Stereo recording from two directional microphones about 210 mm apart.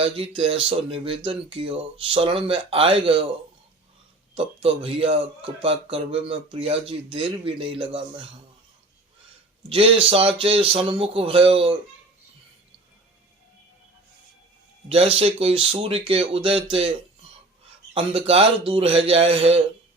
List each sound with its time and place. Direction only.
0.0 s speech: 25° right (ahead or behind)
4.4 s speech: 25° right (ahead or behind)
9.6 s speech: 25° right (ahead or behind)
14.8 s speech: 25° right (ahead or behind)
17.9 s speech: 25° right (ahead or behind)